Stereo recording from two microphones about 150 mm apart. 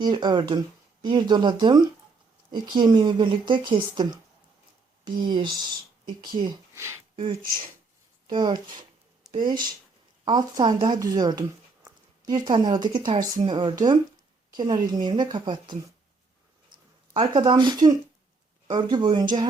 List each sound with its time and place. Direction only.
0.0 s speech: 30° right (ahead or behind)
6.7 s speech: 15° right (ahead or behind)
8.3 s speech: 30° right (ahead or behind)
17.2 s speech: 30° right (ahead or behind)